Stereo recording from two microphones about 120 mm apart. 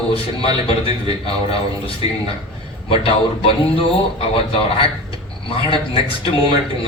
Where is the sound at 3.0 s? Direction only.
50° left (ahead or behind).